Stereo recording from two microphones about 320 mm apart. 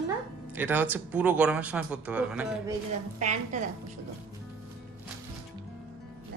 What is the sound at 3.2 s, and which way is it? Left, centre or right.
Speech, right.